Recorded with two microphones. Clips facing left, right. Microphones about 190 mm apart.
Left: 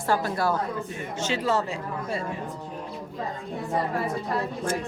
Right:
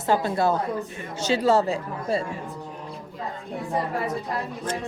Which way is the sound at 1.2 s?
35° right (ahead or behind).